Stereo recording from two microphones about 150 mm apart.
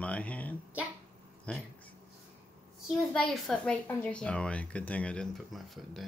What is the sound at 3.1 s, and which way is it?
Speech, 5° left (ahead or behind).